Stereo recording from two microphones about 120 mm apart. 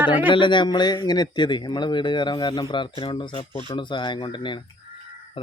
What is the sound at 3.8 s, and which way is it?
Speech, 40° left (ahead or behind).